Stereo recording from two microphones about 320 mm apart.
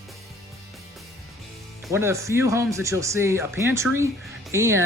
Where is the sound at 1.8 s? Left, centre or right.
Centre.